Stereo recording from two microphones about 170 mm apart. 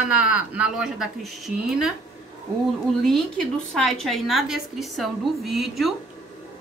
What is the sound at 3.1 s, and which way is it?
A woman's voice, 5° left (ahead or behind).